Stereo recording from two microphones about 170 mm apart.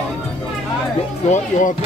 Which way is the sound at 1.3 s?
50° left (ahead or behind).